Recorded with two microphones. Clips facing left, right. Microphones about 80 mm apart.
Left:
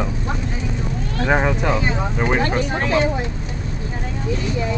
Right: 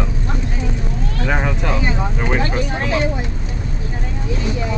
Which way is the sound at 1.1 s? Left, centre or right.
Centre.